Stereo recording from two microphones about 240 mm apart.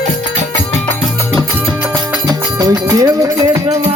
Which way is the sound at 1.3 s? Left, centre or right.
Centre.